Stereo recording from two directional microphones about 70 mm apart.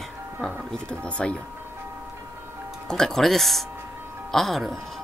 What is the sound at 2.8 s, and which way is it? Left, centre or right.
Speech, centre.